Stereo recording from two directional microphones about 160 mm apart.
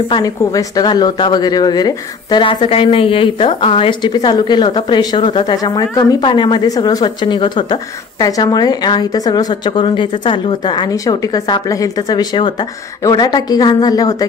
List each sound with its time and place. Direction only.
0.1 s a woman's voice: 20° left (ahead or behind)